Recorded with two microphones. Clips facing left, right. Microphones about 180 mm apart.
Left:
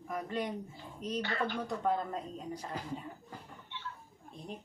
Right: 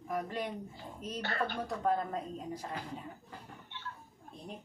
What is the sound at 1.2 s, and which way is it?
Speech, 45° right (ahead or behind).